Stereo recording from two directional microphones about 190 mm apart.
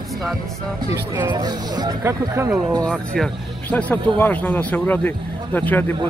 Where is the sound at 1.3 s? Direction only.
20° right (ahead or behind).